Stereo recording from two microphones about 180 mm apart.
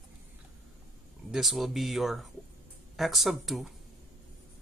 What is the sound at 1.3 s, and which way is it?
Speech, centre (ahead or behind).